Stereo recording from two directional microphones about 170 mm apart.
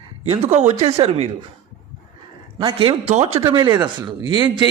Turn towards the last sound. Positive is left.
turn(degrees=-25)  # may be behind; listen again after turning